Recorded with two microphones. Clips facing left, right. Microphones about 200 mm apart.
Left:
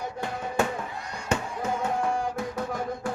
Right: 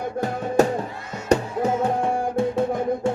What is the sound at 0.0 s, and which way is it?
Music, 40° right (ahead or behind).